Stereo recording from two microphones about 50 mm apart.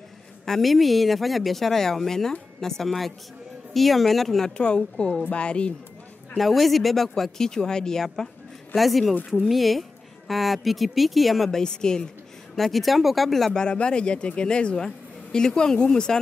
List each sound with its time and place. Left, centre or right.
0.5 s speech: centre
4.6 s speech: centre
6.3 s speech: centre
11.6 s speech: centre
12.5 s speech: centre
13.5 s speech: centre